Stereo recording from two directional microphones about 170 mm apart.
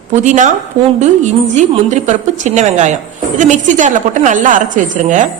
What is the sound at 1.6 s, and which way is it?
A woman's voice, 45° right (ahead or behind).